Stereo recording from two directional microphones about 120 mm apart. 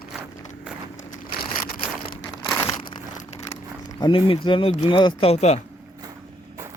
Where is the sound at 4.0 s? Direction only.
45° left (ahead or behind); by 5.6 s 65° left (ahead or behind).